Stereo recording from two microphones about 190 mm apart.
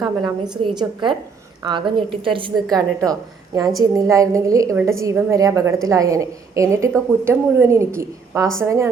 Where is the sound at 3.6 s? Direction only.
20° right (ahead or behind).